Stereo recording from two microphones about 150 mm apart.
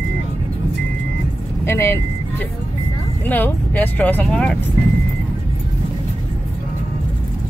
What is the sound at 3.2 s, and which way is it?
Speech, 10° left (ahead or behind).